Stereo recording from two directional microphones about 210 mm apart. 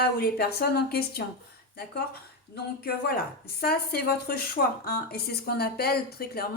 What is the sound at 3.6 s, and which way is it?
A woman's voice, 45° left (ahead or behind).